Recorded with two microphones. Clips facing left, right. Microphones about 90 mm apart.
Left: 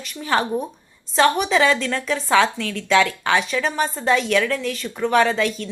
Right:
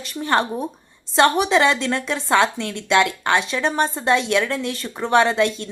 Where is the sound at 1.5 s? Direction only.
20° right (ahead or behind).